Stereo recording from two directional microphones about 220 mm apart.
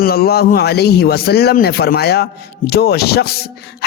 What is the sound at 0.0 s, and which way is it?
Speech, 45° left (ahead or behind).